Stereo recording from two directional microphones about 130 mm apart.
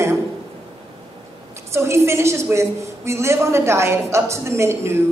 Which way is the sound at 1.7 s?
20° right (ahead or behind).